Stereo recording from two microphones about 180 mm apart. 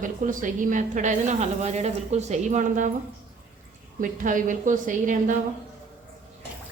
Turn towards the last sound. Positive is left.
turn(degrees=-45)  # may be behind; listen again after turning